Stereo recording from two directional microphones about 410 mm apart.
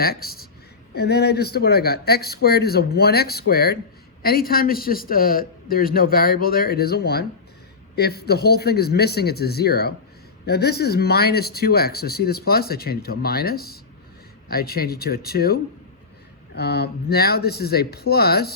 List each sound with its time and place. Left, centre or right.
0.0 s speech: left